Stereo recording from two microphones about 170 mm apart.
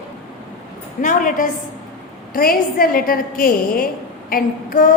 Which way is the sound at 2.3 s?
60° left (ahead or behind).